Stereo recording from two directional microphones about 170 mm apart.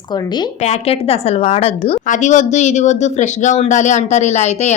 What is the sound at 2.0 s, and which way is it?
Speech, 45° left (ahead or behind).